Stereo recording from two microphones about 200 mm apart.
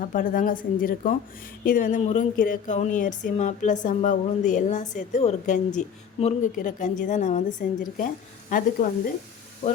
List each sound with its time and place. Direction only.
0.0 s a woman's voice: 40° left (ahead or behind)